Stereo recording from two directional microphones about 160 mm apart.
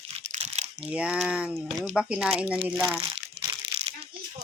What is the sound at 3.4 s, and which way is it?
Crumpling, 20° right (ahead or behind).